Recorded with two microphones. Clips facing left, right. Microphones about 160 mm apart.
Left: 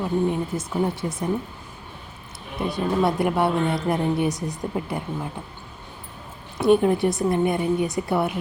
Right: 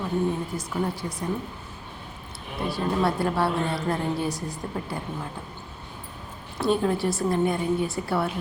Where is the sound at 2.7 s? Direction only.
20° left (ahead or behind).